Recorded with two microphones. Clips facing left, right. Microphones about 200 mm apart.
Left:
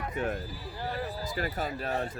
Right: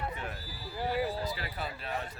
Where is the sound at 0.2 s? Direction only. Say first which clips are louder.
Left 9 dB; 50° left (ahead or behind).